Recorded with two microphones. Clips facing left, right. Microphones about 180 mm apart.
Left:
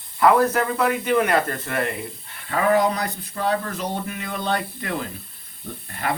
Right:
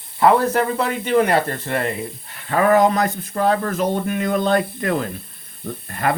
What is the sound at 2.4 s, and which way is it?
Speech, 45° right (ahead or behind).